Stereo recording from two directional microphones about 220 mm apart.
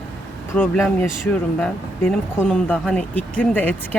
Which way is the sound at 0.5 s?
10° left (ahead or behind).